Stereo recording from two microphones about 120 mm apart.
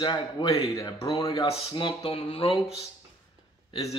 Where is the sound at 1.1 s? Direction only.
45° left (ahead or behind).